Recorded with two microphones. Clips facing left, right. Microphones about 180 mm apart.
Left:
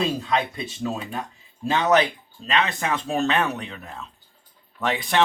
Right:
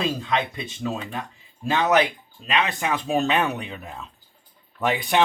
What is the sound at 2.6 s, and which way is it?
Speech, 10° right (ahead or behind).